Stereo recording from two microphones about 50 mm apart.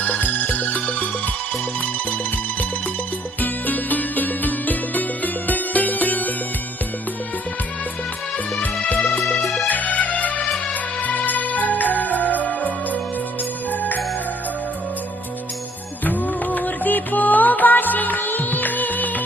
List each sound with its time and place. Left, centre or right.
0.0 s music: left
3.4 s music: left
9.6 s music: left
16.0 s music: left